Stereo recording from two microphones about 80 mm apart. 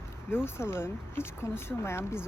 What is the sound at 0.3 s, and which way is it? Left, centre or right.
Speech, left.